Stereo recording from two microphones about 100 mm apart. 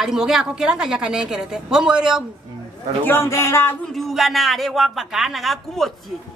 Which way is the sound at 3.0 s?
25° left (ahead or behind).